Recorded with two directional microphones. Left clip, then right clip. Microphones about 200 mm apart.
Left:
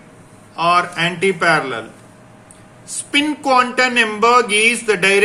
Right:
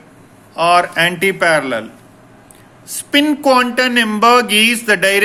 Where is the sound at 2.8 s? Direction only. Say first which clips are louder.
Right 4 dB; 50° right (ahead or behind).